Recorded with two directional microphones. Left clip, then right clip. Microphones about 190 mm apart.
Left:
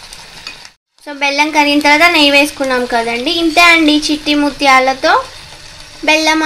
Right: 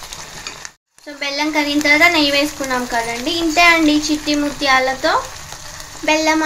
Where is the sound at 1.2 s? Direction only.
35° left (ahead or behind).